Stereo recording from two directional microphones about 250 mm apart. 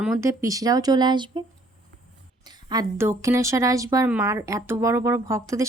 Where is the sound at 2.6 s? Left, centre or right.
Centre.